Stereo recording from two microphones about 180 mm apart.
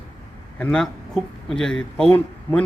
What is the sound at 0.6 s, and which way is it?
A man's voice, 5° left (ahead or behind).